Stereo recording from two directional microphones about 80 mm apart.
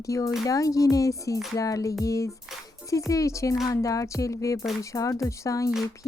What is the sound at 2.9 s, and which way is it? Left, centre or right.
Speech, left.